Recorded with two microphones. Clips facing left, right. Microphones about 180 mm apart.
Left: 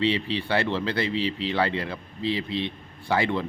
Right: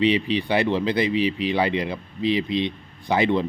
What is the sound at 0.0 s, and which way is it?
A man's voice, 15° right (ahead or behind).